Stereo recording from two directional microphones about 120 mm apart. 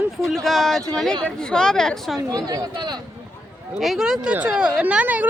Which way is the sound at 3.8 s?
Centre (ahead or behind).